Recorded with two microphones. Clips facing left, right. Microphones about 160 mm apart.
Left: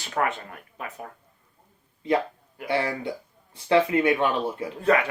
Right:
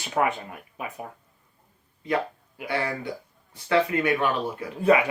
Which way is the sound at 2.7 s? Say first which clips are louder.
Left 2 dB; 25° left (ahead or behind).